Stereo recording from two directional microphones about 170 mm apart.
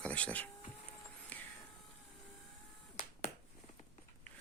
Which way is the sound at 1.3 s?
10° left (ahead or behind).